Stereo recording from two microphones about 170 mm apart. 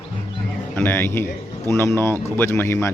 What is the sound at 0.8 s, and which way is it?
A man's voice, 10° left (ahead or behind).